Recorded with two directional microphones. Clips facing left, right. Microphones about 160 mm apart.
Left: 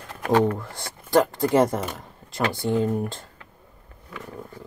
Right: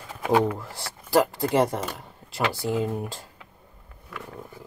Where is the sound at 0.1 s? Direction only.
5° right (ahead or behind).